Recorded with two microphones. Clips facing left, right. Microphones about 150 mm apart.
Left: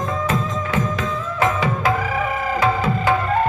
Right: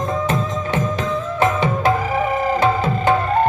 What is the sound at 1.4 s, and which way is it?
Music, 25° right (ahead or behind).